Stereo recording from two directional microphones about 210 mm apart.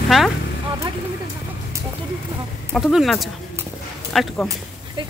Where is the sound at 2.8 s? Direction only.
Centre (ahead or behind).